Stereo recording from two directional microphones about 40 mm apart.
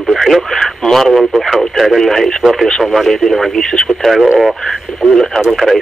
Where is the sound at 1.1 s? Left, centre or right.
Centre.